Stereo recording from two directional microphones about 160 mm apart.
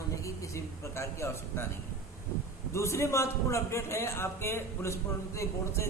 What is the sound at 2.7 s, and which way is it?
A man's voice, 15° left (ahead or behind).